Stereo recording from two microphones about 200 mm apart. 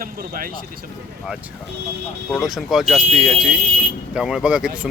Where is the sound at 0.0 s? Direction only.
45° right (ahead or behind).